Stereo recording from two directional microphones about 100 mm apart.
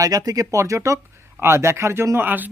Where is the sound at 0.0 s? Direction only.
40° right (ahead or behind).